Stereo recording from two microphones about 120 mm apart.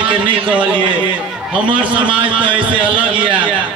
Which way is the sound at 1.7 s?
45° right (ahead or behind).